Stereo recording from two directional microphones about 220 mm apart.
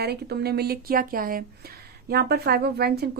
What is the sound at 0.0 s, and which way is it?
Speech, 45° right (ahead or behind).